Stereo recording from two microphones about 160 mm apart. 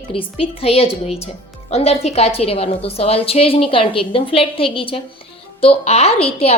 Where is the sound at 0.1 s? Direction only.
35° left (ahead or behind).